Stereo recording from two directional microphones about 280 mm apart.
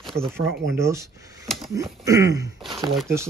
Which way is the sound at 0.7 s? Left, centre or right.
Centre.